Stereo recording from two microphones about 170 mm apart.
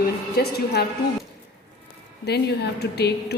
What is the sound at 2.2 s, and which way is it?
A woman's voice, 75° left (ahead or behind).